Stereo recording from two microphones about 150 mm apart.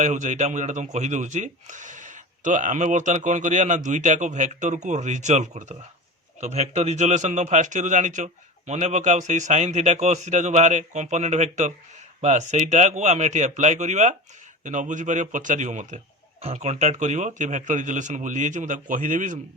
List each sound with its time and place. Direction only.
0.0 s a man's voice: 55° right (ahead or behind)